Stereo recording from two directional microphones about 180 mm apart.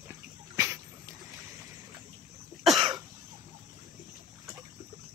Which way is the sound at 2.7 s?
25° right (ahead or behind).